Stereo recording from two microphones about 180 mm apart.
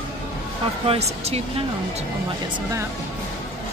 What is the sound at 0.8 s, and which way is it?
Speech, 35° right (ahead or behind).